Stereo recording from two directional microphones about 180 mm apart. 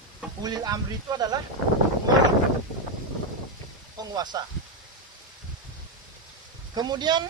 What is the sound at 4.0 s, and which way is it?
Speech, 20° right (ahead or behind).